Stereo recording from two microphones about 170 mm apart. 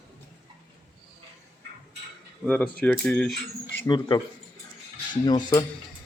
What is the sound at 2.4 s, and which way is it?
Speech, 5° left (ahead or behind).